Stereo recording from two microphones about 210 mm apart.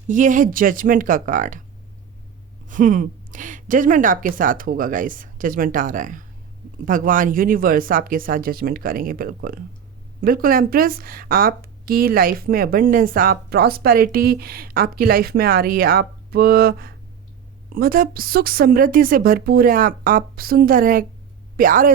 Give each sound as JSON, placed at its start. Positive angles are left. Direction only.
{"t": 0.1, "sound": "a woman's voice", "side_deg": -40}
{"t": 2.6, "sound": "a woman's voice", "side_deg": -40}